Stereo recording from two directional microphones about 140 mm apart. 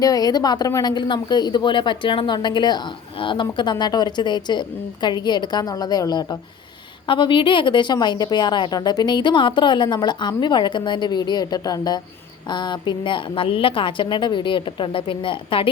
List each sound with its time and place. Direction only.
0.0 s speech: 25° left (ahead or behind)